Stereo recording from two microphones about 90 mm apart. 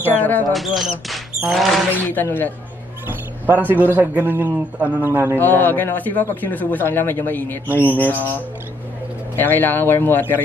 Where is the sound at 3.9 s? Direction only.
20° right (ahead or behind).